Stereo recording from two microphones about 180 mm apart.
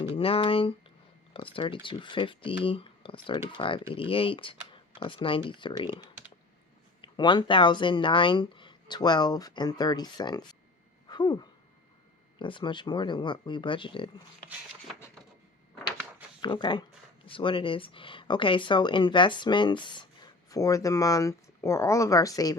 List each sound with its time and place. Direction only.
0.2 s speech: 30° left (ahead or behind)
7.0 s speech: 25° left (ahead or behind)
11.1 s a sound: 25° left (ahead or behind)
12.4 s speech: 25° left (ahead or behind)
16.4 s speech: 25° left (ahead or behind)